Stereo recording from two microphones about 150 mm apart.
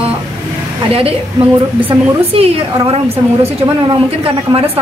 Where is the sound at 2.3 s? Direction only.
40° right (ahead or behind).